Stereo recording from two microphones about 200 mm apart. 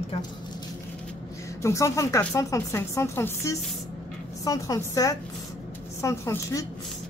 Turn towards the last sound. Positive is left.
turn(degrees=15)  # may be behind; listen again after turning